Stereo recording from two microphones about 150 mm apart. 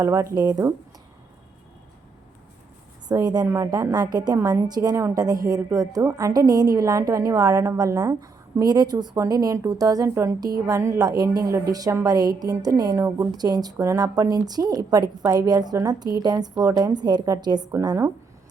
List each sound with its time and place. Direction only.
0.0 s a woman's voice: 20° right (ahead or behind)
3.1 s a woman's voice: 25° right (ahead or behind)